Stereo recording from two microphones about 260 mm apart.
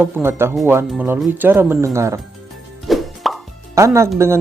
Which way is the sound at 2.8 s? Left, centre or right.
Centre.